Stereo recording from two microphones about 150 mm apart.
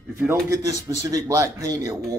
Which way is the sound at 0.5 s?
20° right (ahead or behind).